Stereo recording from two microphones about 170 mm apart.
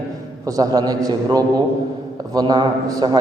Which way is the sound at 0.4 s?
20° right (ahead or behind).